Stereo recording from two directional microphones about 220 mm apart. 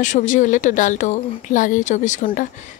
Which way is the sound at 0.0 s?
35° left (ahead or behind).